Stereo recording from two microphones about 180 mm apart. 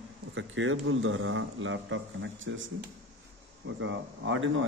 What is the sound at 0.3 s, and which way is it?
A man's voice, 90° right.